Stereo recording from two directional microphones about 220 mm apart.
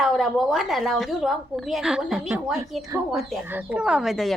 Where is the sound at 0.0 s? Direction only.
Centre (ahead or behind).